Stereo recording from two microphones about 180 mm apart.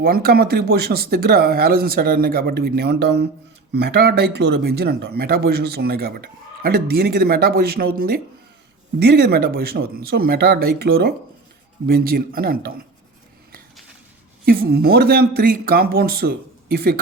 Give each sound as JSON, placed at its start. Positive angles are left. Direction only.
{"t": 0.0, "sound": "speech", "side_deg": -55}
{"t": 14.4, "sound": "speech", "side_deg": -55}